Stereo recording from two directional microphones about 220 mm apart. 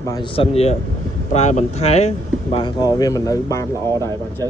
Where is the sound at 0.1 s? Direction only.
25° left (ahead or behind).